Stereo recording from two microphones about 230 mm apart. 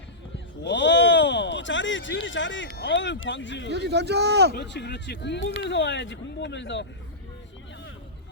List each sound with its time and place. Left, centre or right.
0.3 s speech: left
3.7 s speech: right
4.5 s speech: left